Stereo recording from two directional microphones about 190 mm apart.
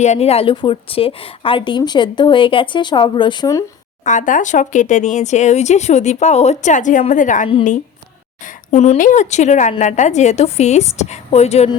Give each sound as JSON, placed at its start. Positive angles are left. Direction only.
{"t": 0.0, "sound": "a woman's voice", "side_deg": 35}
{"t": 4.0, "sound": "speech", "side_deg": 40}